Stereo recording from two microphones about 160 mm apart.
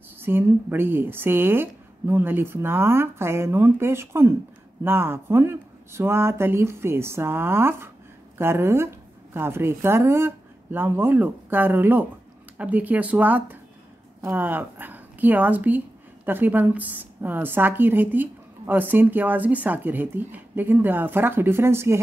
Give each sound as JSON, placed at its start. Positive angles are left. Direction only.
{"t": 0.2, "sound": "a woman's voice", "side_deg": -15}